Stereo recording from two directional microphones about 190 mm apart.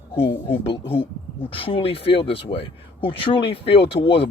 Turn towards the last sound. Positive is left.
turn(degrees=30)  # may be behind; listen again after turning